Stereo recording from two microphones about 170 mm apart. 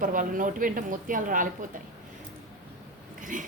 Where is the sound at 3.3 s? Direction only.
50° right (ahead or behind).